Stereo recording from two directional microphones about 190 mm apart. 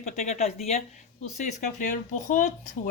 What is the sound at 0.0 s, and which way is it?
Speech, 35° left (ahead or behind).